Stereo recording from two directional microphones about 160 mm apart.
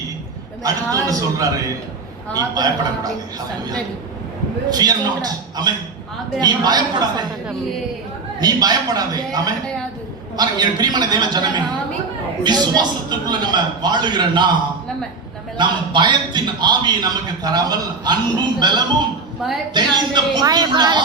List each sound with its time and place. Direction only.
0.6 s a man's voice: 20° right (ahead or behind)
4.7 s a man's voice: 25° right (ahead or behind)
8.4 s a man's voice: 25° right (ahead or behind)